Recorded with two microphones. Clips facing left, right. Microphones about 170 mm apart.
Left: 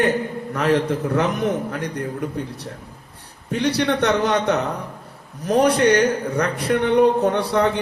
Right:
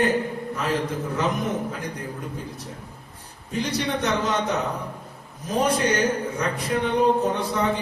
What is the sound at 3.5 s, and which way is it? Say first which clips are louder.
Speech: left 6 dB; 70° left (ahead or behind).